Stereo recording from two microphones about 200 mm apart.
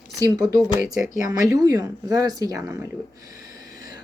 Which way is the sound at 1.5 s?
20° right (ahead or behind).